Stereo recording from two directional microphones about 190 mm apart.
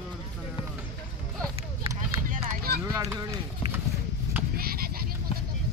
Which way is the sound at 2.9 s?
15° right (ahead or behind).